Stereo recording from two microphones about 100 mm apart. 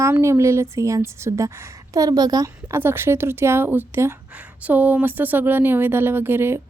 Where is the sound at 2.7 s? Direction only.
25° right (ahead or behind).